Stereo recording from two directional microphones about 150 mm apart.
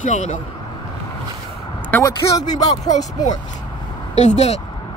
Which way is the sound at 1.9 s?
20° left (ahead or behind).